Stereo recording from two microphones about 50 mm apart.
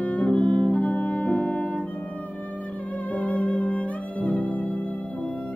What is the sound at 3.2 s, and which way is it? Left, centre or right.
Music, left.